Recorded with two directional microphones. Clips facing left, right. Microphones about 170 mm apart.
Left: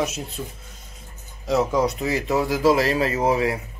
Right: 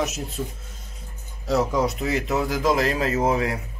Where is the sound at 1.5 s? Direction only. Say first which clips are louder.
Left 1 dB; centre (ahead or behind).